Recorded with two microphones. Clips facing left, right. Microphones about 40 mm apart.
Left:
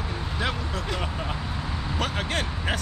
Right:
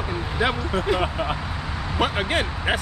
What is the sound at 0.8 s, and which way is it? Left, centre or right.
Speech, right.